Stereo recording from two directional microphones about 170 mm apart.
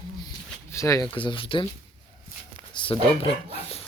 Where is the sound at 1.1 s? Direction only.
30° left (ahead or behind).